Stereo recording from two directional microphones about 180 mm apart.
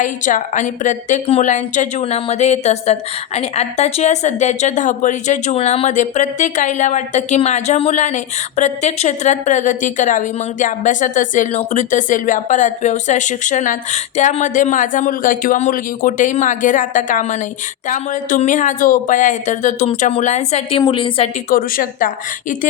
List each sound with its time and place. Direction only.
0.0 s a woman's voice: 45° left (ahead or behind); by 21.2 s 25° left (ahead or behind)
21.5 s a woman's voice: 50° left (ahead or behind)